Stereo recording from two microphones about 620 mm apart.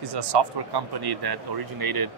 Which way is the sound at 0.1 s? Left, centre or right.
Right.